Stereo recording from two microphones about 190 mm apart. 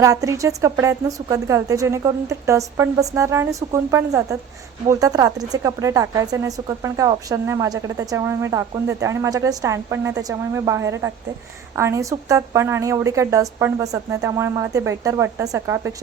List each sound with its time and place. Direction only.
0.0 s speech: 15° right (ahead or behind)